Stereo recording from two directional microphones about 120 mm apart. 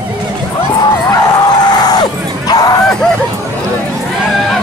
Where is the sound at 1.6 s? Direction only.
35° left (ahead or behind).